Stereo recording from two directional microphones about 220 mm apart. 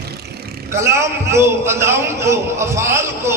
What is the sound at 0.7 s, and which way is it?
A man's voice, 10° right (ahead or behind).